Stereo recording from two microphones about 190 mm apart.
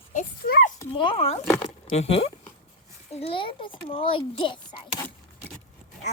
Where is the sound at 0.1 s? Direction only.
45° left (ahead or behind).